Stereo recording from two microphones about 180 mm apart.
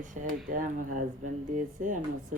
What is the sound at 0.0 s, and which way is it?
Speech, 45° right (ahead or behind).